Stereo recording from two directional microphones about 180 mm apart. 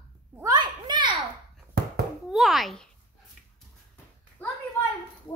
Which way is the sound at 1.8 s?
65° right (ahead or behind).